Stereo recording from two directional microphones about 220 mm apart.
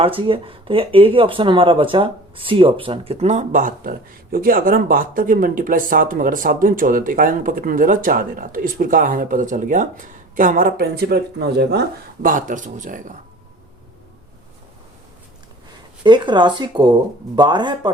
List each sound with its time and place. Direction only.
0.0 s speech: 25° right (ahead or behind)
16.0 s speech: 20° right (ahead or behind)